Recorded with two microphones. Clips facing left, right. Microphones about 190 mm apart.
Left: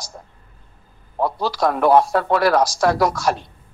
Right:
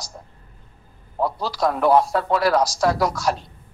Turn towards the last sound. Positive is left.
turn(degrees=65)  # may be behind; listen again after turning